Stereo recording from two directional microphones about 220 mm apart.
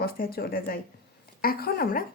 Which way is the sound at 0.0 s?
45° left (ahead or behind).